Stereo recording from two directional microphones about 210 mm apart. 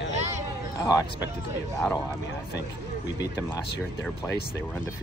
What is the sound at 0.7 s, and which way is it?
Speech, 15° left (ahead or behind).